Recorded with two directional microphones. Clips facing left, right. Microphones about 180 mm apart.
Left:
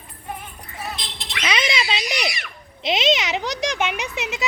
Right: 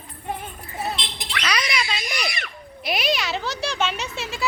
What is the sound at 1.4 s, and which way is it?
A child's voice, 25° left (ahead or behind).